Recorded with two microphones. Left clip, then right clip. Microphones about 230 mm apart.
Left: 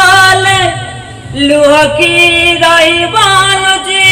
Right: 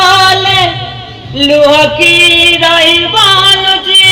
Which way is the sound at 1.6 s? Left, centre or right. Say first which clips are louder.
Even; centre.